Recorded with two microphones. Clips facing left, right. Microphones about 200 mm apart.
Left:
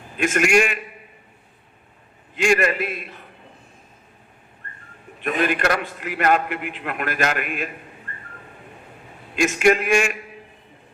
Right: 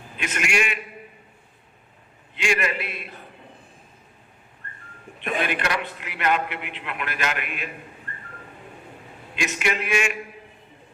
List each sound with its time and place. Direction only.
0.2 s a man's voice: 45° left (ahead or behind)
2.3 s a man's voice: 45° left (ahead or behind)
5.2 s a man's voice: 45° left (ahead or behind)
9.3 s a man's voice: 45° left (ahead or behind)